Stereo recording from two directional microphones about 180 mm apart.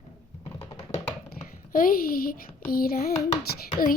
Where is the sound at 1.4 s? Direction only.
50° left (ahead or behind).